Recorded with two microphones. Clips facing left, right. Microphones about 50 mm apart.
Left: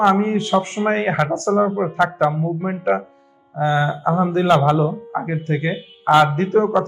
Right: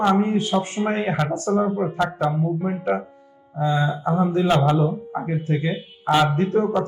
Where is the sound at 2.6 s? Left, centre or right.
Left.